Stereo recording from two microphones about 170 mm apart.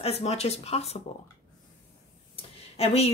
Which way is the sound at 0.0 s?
35° left (ahead or behind).